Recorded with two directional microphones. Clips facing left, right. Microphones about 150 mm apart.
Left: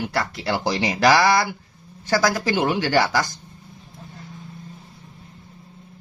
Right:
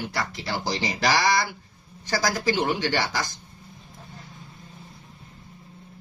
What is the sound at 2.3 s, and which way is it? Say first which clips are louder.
Speech: even; 55° left (ahead or behind).